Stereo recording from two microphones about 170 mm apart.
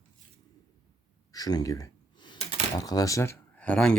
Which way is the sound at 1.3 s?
20° left (ahead or behind).